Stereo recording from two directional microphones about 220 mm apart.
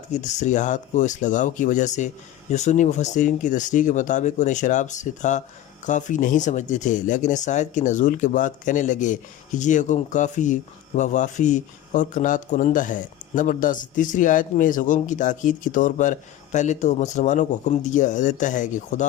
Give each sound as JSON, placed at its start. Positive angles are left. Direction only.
{"t": 0.1, "sound": "speech", "side_deg": 30}